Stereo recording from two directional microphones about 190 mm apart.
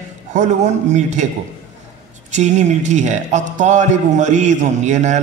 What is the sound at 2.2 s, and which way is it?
Speech, 40° right (ahead or behind).